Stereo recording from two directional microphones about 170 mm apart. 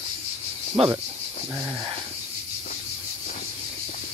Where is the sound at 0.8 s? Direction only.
35° right (ahead or behind).